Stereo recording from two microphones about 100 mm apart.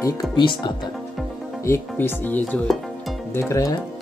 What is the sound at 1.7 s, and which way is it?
Chopping, 20° left (ahead or behind).